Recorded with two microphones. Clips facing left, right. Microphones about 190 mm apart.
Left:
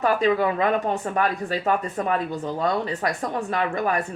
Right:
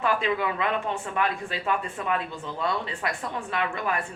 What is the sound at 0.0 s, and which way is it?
Speech, 40° left (ahead or behind).